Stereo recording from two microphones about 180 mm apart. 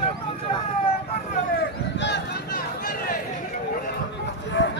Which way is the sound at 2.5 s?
50° left (ahead or behind).